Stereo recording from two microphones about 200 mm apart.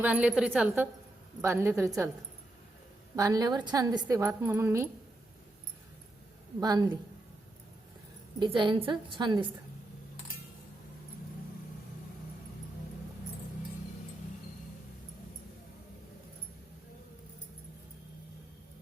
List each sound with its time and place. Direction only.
0.0 s a woman's voice: 5° right (ahead or behind)
3.2 s a woman's voice: 20° right (ahead or behind)
6.6 s a woman's voice: 20° right (ahead or behind)
8.4 s a woman's voice: 25° right (ahead or behind)